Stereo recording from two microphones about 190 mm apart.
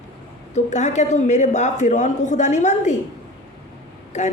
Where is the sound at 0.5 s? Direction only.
35° left (ahead or behind).